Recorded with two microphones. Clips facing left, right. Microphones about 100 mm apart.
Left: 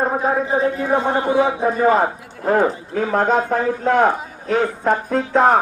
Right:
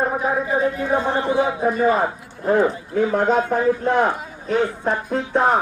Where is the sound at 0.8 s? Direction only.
30° left (ahead or behind).